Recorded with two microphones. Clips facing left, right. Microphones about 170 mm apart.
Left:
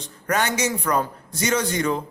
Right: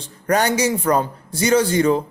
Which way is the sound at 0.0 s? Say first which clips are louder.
Right 5 dB; 35° right (ahead or behind).